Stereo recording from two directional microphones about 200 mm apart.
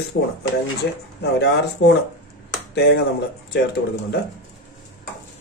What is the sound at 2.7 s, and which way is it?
Speech, 55° left (ahead or behind).